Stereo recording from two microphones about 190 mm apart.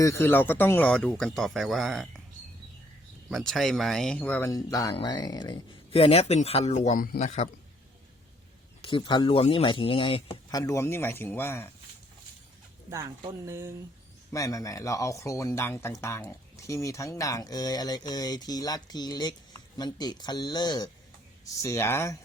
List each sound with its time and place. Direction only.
0.0 s speech: 15° left (ahead or behind)
3.2 s speech: centre (ahead or behind); by 7.5 s 35° left (ahead or behind)
8.8 s speech: 25° left (ahead or behind)
13.2 s speech: 15° right (ahead or behind)
14.3 s speech: 15° left (ahead or behind)